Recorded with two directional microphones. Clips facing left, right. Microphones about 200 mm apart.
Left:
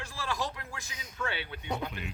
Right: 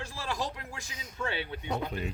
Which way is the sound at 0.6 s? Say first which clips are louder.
Right 1 dB; 25° right (ahead or behind).